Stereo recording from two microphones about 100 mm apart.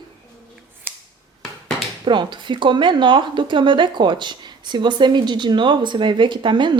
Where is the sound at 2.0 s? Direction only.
50° right (ahead or behind).